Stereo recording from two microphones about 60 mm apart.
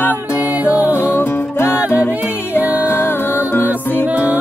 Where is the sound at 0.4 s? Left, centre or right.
Right.